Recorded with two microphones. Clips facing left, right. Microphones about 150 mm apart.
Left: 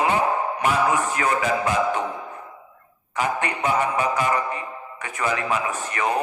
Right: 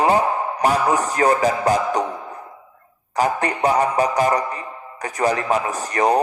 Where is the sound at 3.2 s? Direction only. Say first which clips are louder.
Right 5 dB; 35° right (ahead or behind).